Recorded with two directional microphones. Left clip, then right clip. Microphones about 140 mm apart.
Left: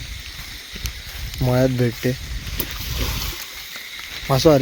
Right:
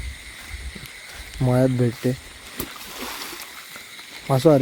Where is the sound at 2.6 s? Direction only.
Centre (ahead or behind).